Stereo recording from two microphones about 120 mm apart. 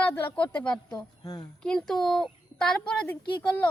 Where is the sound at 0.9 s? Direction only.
35° left (ahead or behind).